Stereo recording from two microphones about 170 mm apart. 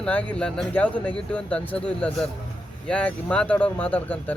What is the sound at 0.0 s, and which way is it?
Speech, 5° left (ahead or behind).